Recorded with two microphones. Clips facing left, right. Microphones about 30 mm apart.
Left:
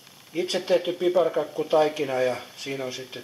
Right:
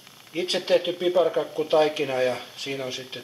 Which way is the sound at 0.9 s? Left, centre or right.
Centre.